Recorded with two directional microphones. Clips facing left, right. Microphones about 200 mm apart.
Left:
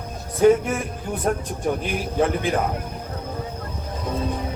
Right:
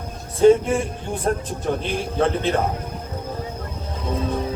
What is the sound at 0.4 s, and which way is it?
Speech, 30° right (ahead or behind).